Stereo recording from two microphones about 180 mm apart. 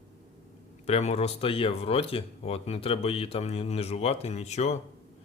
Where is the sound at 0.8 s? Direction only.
35° left (ahead or behind).